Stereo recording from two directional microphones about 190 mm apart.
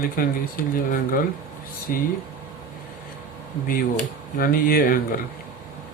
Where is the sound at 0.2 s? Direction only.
50° left (ahead or behind).